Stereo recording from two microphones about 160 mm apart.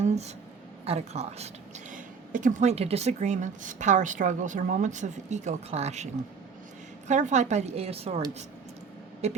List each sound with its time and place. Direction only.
0.0 s a sound: 40° right (ahead or behind)
0.9 s speech: 40° right (ahead or behind)
1.9 s speech: 55° right (ahead or behind)
7.1 s speech: 50° right (ahead or behind)
9.2 s speech: 40° right (ahead or behind)